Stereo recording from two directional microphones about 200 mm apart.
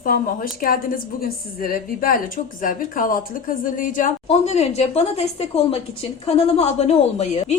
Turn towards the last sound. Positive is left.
turn(degrees=30)  # may be behind; listen again after turning